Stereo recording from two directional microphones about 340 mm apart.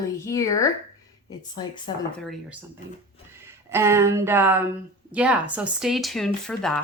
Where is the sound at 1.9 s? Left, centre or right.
Centre.